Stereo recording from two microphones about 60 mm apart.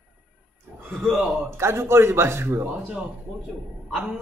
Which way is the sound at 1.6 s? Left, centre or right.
Right.